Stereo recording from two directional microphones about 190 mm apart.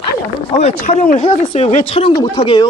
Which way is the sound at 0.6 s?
40° left (ahead or behind).